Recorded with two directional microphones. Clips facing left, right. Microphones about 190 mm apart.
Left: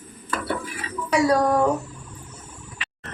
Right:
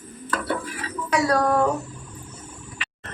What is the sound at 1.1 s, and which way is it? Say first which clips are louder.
Speech: left 2 dB; 10° left (ahead or behind).